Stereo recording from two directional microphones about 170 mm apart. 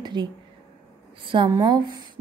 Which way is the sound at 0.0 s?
25° right (ahead or behind).